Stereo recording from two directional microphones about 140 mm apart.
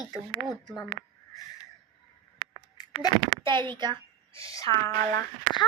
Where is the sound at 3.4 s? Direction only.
35° right (ahead or behind).